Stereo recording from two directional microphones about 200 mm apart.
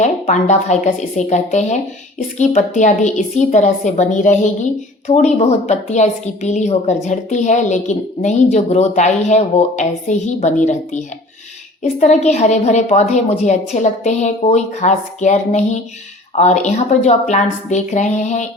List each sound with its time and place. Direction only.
0.0 s a woman's voice: 35° left (ahead or behind)